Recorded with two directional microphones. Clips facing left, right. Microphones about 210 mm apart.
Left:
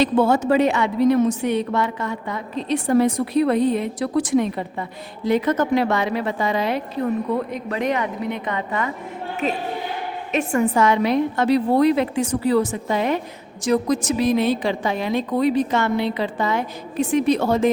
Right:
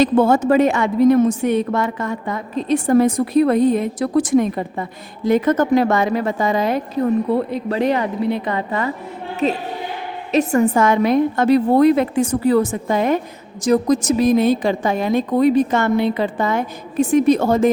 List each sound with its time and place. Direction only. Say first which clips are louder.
0.0 s a woman's voice: right 3 dB; 50° right (ahead or behind)